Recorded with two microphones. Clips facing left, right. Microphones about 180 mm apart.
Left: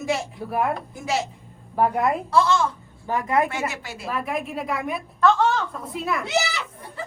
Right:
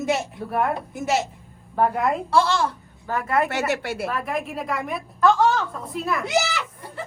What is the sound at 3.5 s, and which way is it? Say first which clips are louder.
Speech: right 5 dB; 70° right (ahead or behind).